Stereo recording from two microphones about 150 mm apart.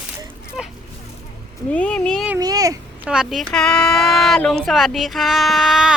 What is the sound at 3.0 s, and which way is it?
Speech, 5° right (ahead or behind).